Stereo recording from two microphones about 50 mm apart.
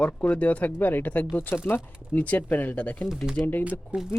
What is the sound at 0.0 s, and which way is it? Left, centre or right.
Speech, left.